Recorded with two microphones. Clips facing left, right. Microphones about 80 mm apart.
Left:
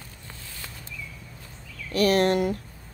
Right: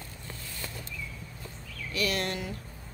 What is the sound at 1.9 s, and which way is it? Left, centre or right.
Speech, left.